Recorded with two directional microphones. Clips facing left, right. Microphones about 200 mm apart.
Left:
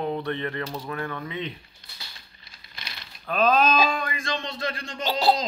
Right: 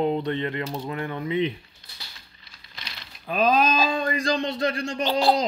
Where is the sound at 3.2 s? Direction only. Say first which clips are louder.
Even; 15° right (ahead or behind).